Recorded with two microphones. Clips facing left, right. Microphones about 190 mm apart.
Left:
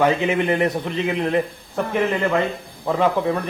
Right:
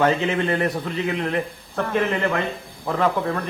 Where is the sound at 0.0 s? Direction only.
15° left (ahead or behind).